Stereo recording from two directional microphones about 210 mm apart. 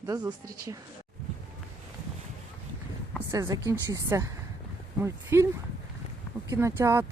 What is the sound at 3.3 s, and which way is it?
Speech, 15° right (ahead or behind).